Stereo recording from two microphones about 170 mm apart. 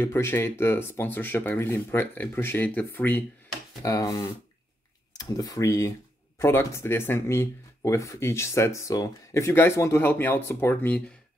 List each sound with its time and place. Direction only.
0.0 s speech: 15° left (ahead or behind)